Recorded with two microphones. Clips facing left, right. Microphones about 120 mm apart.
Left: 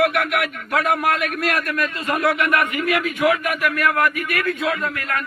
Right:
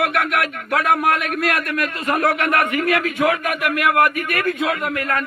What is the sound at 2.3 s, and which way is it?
A man's voice, 70° right (ahead or behind).